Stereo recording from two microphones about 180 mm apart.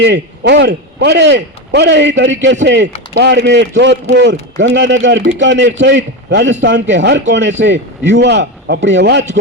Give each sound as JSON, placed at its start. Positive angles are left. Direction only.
{"t": 0.0, "sound": "a man's voice", "side_deg": -70}